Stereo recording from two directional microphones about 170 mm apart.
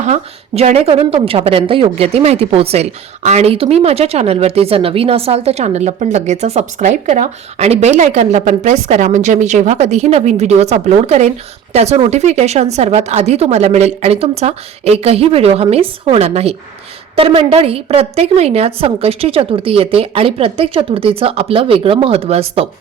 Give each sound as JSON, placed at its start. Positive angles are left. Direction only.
{"t": 0.0, "sound": "speech", "side_deg": -40}